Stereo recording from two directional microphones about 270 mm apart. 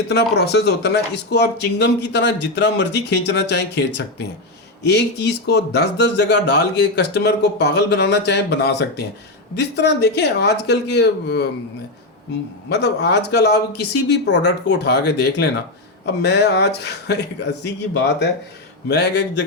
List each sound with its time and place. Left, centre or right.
0.1 s speech: left
12.6 s speech: left